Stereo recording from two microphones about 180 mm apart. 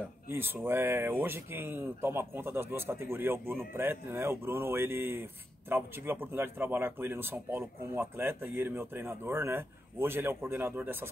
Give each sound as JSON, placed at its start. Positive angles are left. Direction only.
{"t": 0.3, "sound": "speech", "side_deg": -10}